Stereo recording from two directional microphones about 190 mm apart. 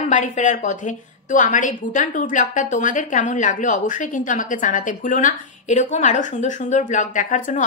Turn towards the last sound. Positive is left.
turn(degrees=45)  # may be behind; listen again after turning